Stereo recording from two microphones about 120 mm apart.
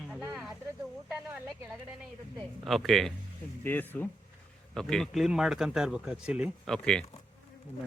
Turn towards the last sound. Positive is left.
turn(degrees=5)  # may be behind; listen again after turning